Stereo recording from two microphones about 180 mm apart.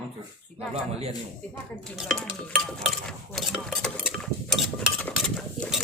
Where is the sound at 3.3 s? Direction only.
Centre (ahead or behind).